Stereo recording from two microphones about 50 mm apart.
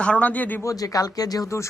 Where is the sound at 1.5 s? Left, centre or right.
Left.